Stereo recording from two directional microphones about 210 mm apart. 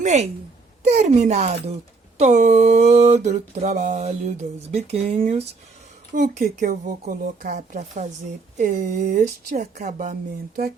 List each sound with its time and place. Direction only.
0.0 s a woman's voice: 35° right (ahead or behind)